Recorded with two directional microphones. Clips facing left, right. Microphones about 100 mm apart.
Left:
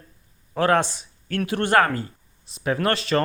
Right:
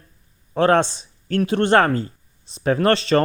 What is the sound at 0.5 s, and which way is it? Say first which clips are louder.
Speech: right 4 dB; 30° right (ahead or behind).